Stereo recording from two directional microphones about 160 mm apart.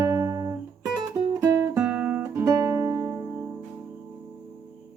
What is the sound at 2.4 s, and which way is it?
Music, 20° right (ahead or behind).